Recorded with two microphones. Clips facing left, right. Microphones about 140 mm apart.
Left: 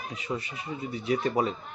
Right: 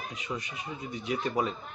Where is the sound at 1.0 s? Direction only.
35° left (ahead or behind).